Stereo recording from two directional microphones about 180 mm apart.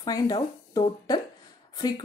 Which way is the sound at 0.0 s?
20° left (ahead or behind).